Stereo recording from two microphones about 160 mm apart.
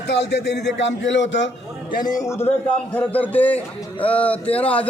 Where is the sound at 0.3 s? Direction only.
90° left.